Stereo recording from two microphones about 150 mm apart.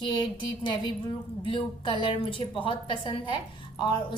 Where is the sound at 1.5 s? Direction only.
35° left (ahead or behind).